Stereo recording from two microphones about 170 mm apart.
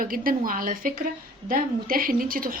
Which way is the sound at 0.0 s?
55° right (ahead or behind).